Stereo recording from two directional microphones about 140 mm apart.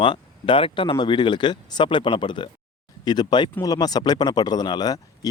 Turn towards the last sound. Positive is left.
turn(degrees=25)  # may be behind; listen again after turning